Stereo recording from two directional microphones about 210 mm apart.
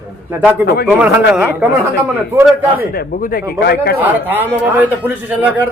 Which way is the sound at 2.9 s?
45° left (ahead or behind).